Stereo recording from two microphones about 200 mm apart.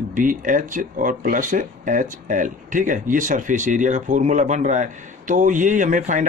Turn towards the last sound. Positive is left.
turn(degrees=-40)  # may be behind; listen again after turning